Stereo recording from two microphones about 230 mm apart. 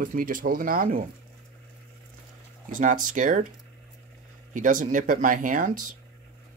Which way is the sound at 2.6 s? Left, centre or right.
Right.